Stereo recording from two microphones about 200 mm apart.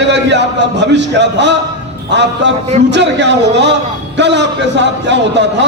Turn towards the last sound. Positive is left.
turn(degrees=-60)  # may be behind; listen again after turning